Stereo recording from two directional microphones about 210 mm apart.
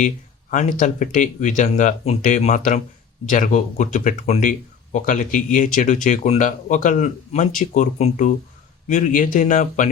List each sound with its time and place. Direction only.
0.5 s speech: 35° left (ahead or behind)